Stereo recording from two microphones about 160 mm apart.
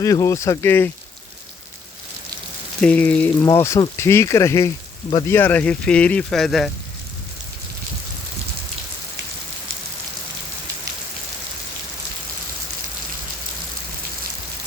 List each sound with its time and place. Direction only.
0.0 s speech: 20° left (ahead or behind)
2.8 s speech: 10° left (ahead or behind)